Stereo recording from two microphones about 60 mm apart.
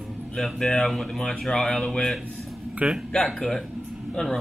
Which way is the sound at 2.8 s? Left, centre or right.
Right.